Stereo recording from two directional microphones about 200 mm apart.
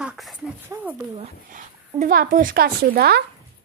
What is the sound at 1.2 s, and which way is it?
A woman's voice, 40° right (ahead or behind).